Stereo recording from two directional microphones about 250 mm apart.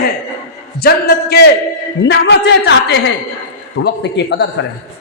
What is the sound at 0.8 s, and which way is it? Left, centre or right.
A man's voice, left.